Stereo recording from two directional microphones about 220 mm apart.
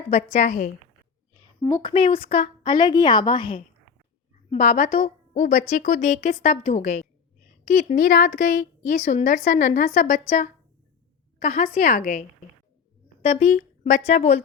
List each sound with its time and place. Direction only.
0.1 s a woman's voice: 30° left (ahead or behind)
1.6 s a woman's voice: 20° left (ahead or behind)
4.4 s a woman's voice: 35° left (ahead or behind)
13.2 s a woman's voice: 30° left (ahead or behind)